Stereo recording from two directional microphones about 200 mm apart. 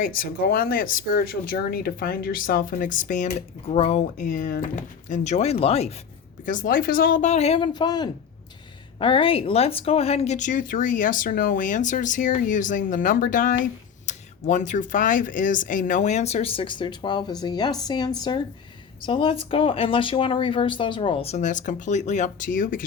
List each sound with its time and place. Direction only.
0.0 s speech: 45° left (ahead or behind); by 5.9 s 30° left (ahead or behind)
6.4 s speech: 40° left (ahead or behind)